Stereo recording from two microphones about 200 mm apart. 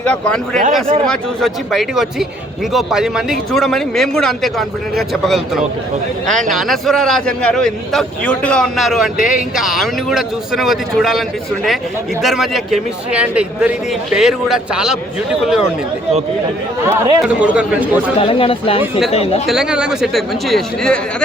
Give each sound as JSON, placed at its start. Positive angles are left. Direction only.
{"t": 0.0, "sound": "a man's voice", "side_deg": 5}
{"t": 12.2, "sound": "a man's voice", "side_deg": 0}
{"t": 16.8, "sound": "speech", "side_deg": -10}
{"t": 18.2, "sound": "speech", "side_deg": 25}
{"t": 18.8, "sound": "a man's voice", "side_deg": 0}
{"t": 19.1, "sound": "speech", "side_deg": 30}
{"t": 19.5, "sound": "a man's voice", "side_deg": -5}